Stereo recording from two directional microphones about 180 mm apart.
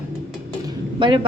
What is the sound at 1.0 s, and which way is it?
Speech, 25° right (ahead or behind).